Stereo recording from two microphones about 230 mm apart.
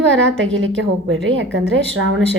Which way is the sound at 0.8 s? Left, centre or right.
Right.